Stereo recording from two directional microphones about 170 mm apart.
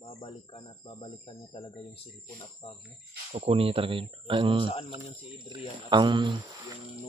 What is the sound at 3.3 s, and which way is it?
Speech, 40° right (ahead or behind).